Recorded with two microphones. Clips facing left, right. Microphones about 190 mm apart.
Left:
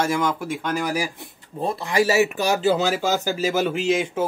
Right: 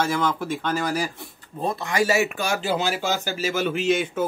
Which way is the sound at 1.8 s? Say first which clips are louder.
Left 3 dB; 35° left (ahead or behind).